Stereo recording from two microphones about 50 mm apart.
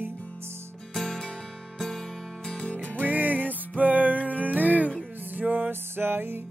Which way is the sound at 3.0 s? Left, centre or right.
Right.